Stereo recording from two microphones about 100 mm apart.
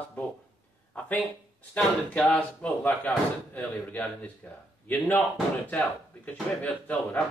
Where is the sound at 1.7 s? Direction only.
15° left (ahead or behind).